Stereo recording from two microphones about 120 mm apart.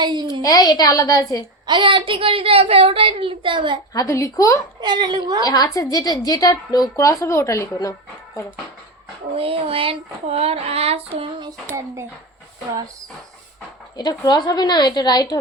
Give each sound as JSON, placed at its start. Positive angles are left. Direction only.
{"t": 0.0, "sound": "a sound", "side_deg": -40}
{"t": 0.4, "sound": "a woman's voice", "side_deg": 30}
{"t": 1.6, "sound": "a woman's voice", "side_deg": -45}
{"t": 3.9, "sound": "a woman's voice", "side_deg": 25}
{"t": 4.8, "sound": "speech", "side_deg": -35}
{"t": 5.5, "sound": "a woman's voice", "side_deg": 30}
{"t": 9.3, "sound": "a sound", "side_deg": -50}
{"t": 13.9, "sound": "a woman's voice", "side_deg": 35}